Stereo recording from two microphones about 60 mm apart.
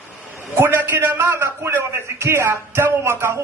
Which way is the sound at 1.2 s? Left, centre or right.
Right.